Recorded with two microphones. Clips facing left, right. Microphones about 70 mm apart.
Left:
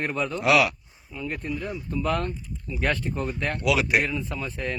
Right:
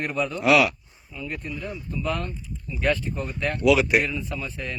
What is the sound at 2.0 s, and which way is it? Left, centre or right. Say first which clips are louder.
Speech: left 2 dB; left.